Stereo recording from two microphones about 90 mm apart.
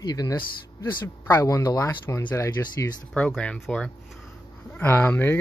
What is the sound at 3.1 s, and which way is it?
Speech, 15° left (ahead or behind).